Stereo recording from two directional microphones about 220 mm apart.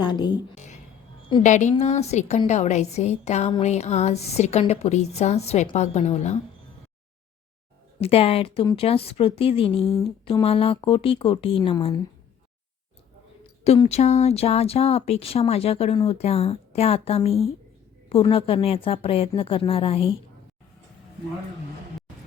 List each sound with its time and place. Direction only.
0.0 s a woman's voice: 20° left (ahead or behind)
0.5 s music: 30° left (ahead or behind)
1.3 s a woman's voice: 35° left (ahead or behind)
8.0 s a woman's voice: 25° left (ahead or behind)
13.7 s a woman's voice: 30° left (ahead or behind)